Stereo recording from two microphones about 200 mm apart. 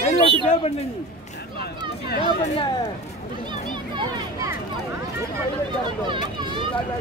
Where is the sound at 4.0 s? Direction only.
15° right (ahead or behind).